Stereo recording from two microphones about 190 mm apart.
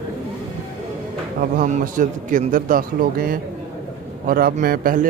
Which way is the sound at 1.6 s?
45° right (ahead or behind).